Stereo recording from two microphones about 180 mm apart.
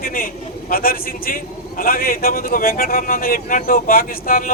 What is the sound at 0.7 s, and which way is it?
A man's voice, 55° left (ahead or behind).